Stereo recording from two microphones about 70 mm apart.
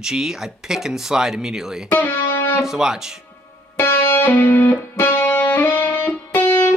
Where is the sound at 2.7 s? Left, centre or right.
Centre.